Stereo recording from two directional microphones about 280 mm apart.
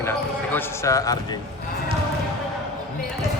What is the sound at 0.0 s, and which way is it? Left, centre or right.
Basketball bounce, centre.